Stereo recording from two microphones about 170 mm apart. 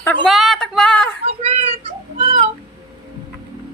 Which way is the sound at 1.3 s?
40° right (ahead or behind).